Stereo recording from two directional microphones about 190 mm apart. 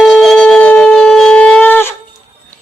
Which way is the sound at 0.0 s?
Centre (ahead or behind).